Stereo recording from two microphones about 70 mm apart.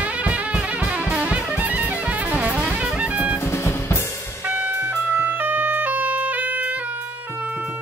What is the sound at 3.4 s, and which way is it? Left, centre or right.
Drum, left.